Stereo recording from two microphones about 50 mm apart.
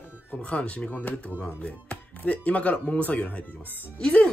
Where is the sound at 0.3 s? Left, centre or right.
Left.